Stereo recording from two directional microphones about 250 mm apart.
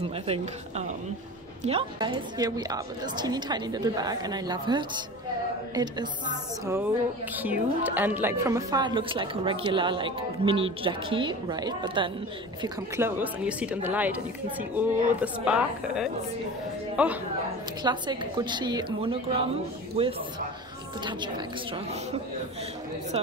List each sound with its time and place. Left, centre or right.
0.0 s a woman's voice: right; by 17.2 s centre
17.8 s a woman's voice: centre